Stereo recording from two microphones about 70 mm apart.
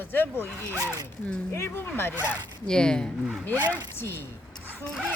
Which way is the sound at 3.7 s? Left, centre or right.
Left.